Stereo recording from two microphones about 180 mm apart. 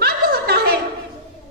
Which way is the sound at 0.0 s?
60° right (ahead or behind).